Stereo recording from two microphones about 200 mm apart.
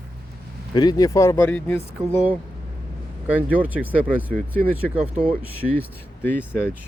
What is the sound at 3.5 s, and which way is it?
Speech, 10° right (ahead or behind).